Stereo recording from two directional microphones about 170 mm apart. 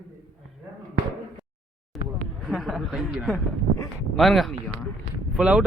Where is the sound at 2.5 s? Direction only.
Centre (ahead or behind).